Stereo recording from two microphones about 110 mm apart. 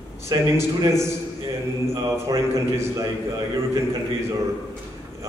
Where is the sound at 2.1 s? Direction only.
25° right (ahead or behind).